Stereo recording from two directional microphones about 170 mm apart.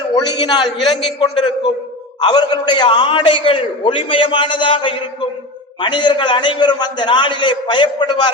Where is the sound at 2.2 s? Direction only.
25° left (ahead or behind).